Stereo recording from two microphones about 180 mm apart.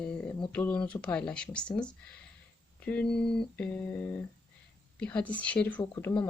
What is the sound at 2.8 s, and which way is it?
A woman's voice, 5° left (ahead or behind).